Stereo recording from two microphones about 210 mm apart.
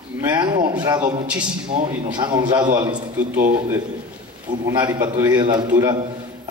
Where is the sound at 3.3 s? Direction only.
40° right (ahead or behind).